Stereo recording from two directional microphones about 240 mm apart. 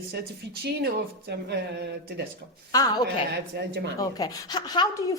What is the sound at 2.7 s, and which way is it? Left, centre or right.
Speech, centre.